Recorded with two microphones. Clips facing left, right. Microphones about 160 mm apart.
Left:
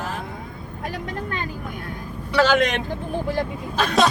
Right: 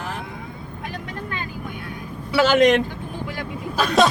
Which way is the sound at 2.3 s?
5° right (ahead or behind).